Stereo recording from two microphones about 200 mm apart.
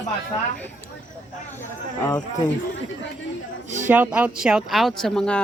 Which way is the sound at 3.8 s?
10° right (ahead or behind).